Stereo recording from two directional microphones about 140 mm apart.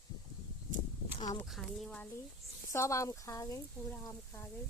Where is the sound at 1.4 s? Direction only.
Centre (ahead or behind).